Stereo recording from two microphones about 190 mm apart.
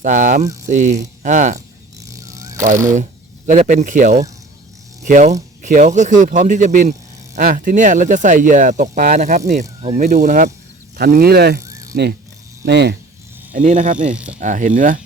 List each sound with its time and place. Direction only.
0.0 s speech: 45° right (ahead or behind)
2.0 s dog: 15° right (ahead or behind)
2.9 s speech: 40° right (ahead or behind)
10.9 s speech: 50° right (ahead or behind)
11.6 s a sound: 15° right (ahead or behind)
12.6 s speech: 60° right (ahead or behind)
13.5 s speech: 40° right (ahead or behind)
14.1 s speech: 5° right (ahead or behind)
14.3 s speech: 40° right (ahead or behind)